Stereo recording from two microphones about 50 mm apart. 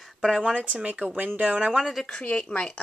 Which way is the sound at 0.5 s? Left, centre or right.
Right.